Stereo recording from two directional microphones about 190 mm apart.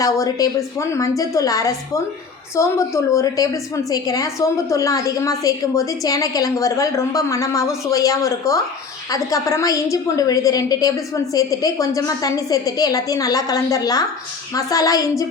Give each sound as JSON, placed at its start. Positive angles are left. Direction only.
{"t": 0.0, "sound": "a woman's voice", "side_deg": 15}